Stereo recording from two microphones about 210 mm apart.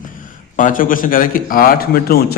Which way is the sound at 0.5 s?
40° left (ahead or behind).